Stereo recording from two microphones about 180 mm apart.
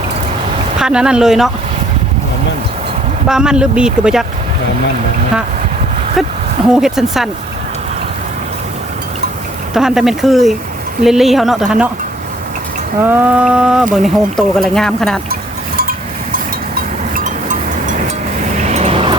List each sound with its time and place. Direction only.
0.8 s speech: 5° right (ahead or behind)
3.2 s speech: 5° right (ahead or behind)
6.7 s speech: centre (ahead or behind)
9.7 s speech: centre (ahead or behind)
13.1 s speech: 10° right (ahead or behind)
16.7 s a sound: 50° right (ahead or behind)
18.7 s vehicle: 35° right (ahead or behind)